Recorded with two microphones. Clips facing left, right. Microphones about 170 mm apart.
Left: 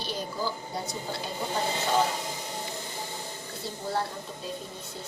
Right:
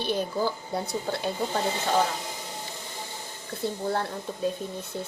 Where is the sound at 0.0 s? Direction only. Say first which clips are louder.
Right 6 dB; 55° right (ahead or behind).